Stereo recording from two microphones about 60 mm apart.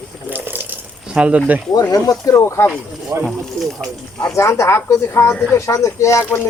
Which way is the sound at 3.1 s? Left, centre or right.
Right.